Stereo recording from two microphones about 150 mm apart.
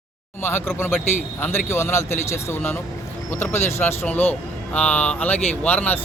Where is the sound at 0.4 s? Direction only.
15° left (ahead or behind).